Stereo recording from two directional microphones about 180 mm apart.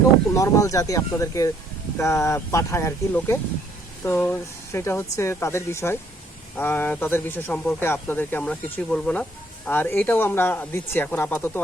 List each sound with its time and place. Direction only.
0.3 s speech: 15° left (ahead or behind)